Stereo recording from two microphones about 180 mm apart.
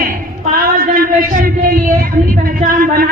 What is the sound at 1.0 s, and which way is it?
A woman's voice, 50° right (ahead or behind).